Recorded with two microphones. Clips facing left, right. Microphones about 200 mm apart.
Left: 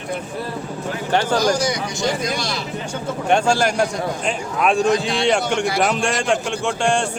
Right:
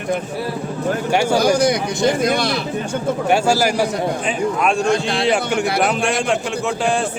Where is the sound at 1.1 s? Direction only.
10° right (ahead or behind).